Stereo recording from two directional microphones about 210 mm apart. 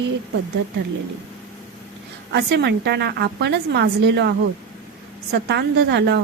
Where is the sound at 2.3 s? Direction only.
55° right (ahead or behind).